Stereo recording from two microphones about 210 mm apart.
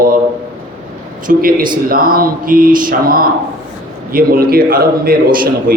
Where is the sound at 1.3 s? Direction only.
45° right (ahead or behind).